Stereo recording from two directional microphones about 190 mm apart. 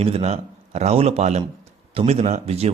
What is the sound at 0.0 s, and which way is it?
A man's voice, 30° right (ahead or behind).